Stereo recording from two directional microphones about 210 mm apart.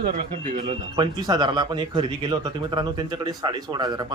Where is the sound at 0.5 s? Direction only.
20° right (ahead or behind).